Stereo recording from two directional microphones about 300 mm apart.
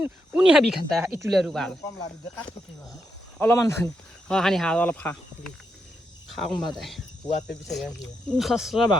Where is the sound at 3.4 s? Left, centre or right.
Centre.